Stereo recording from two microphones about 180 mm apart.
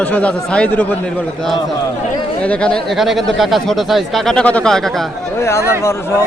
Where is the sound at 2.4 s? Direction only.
5° left (ahead or behind).